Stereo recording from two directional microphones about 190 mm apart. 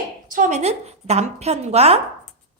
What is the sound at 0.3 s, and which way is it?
A woman's voice, 45° right (ahead or behind).